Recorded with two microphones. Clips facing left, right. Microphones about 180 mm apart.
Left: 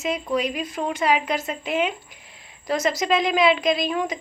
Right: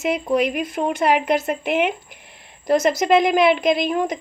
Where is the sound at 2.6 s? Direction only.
50° right (ahead or behind).